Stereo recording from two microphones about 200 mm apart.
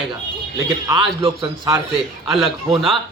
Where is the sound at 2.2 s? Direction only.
Centre (ahead or behind).